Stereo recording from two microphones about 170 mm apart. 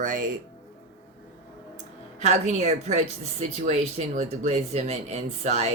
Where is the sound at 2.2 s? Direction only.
40° right (ahead or behind).